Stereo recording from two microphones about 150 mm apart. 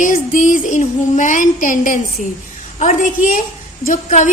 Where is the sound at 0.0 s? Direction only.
60° left (ahead or behind).